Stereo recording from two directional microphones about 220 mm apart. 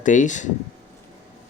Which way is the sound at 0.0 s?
35° left (ahead or behind).